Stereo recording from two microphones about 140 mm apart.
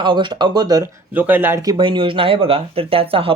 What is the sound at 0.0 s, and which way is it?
Speech, 35° right (ahead or behind).